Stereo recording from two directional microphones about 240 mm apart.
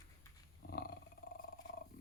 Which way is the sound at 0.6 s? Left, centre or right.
Left.